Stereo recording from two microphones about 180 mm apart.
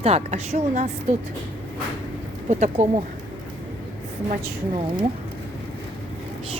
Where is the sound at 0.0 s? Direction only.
35° right (ahead or behind).